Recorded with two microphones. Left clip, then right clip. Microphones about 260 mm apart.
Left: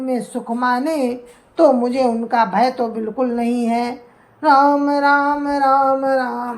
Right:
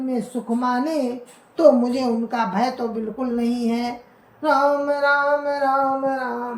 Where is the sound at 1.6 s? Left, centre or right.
Centre.